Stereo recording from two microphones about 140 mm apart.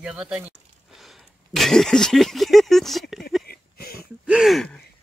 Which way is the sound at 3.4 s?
90° left.